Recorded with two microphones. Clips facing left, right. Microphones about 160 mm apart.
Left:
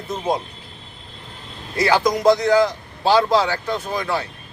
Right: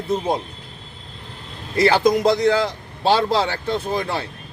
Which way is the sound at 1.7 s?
25° right (ahead or behind).